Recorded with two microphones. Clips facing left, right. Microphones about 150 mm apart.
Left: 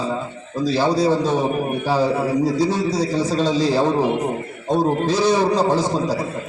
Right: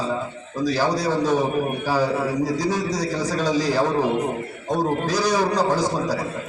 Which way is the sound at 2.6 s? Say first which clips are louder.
Left 4 dB; 25° left (ahead or behind).